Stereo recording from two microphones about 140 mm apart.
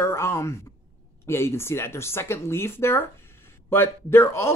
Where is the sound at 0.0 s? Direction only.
20° left (ahead or behind).